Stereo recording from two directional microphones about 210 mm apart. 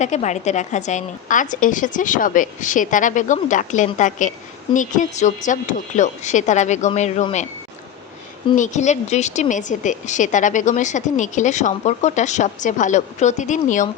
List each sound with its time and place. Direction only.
0.0 s a woman's voice: 35° left (ahead or behind)
8.5 s a woman's voice: 35° left (ahead or behind)